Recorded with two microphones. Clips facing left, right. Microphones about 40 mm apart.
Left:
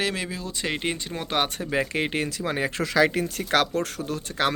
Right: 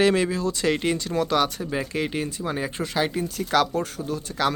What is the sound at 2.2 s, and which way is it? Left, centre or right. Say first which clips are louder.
Speech: even; left.